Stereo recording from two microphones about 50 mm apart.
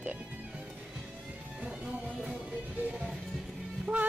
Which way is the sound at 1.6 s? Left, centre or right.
Centre.